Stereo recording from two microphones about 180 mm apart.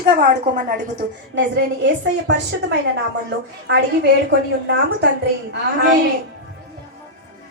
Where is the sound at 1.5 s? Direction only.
85° right.